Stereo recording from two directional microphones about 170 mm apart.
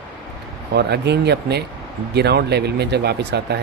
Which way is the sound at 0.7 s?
75° right (ahead or behind).